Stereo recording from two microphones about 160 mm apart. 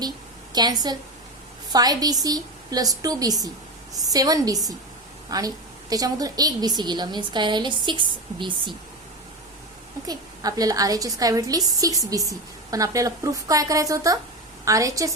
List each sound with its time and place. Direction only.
0.5 s a woman's voice: 25° right (ahead or behind)
10.1 s a woman's voice: 25° right (ahead or behind)